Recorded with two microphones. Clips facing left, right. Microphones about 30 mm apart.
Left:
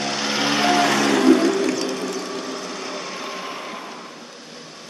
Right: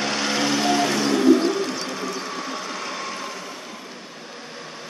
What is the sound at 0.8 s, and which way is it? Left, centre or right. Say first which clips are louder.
Music: left 3 dB; left.